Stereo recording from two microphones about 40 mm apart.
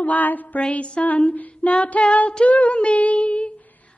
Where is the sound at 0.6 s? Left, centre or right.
Left.